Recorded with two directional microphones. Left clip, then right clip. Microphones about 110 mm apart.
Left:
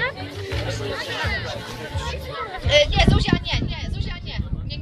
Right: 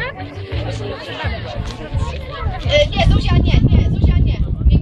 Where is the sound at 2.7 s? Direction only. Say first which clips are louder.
Right 2 dB; 25° left (ahead or behind).